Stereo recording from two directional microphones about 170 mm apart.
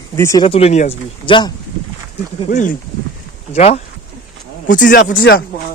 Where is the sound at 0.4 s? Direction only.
35° left (ahead or behind).